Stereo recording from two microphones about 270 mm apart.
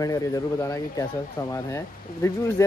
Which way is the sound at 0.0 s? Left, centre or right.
Centre.